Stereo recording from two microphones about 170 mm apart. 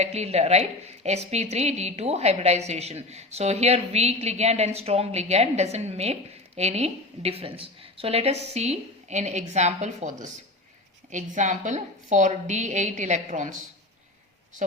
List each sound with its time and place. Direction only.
0.0 s a woman's voice: 40° right (ahead or behind)